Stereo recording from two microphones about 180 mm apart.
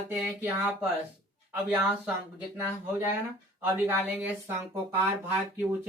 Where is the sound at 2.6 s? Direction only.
10° right (ahead or behind).